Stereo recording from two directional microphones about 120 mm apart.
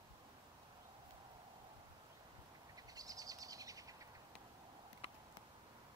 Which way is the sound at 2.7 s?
30° right (ahead or behind).